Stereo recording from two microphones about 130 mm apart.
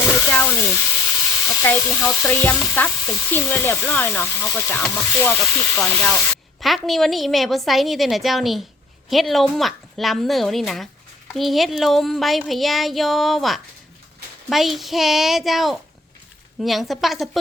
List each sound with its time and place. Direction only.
0.0 s frying: 20° left (ahead or behind)
1.5 s sizzle: 20° left (ahead or behind)
6.6 s speech: centre (ahead or behind)